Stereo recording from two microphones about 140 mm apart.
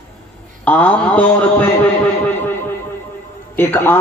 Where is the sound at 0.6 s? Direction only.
10° left (ahead or behind).